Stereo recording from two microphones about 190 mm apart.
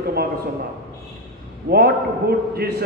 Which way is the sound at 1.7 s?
55° right (ahead or behind).